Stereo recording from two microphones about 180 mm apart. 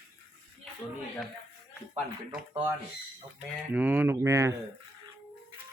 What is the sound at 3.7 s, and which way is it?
Speech, 10° right (ahead or behind).